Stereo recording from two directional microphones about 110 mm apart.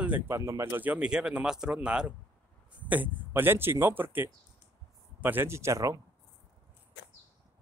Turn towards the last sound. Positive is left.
turn(degrees=-30)  # may be behind; listen again after turning